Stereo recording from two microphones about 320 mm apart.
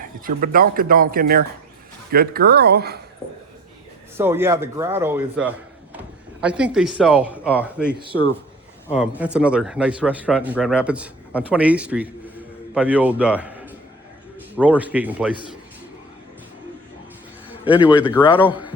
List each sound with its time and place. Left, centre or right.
0.0 s speech: right
4.2 s a man's voice: centre
17.8 s speech: centre
18.1 s a man's voice: centre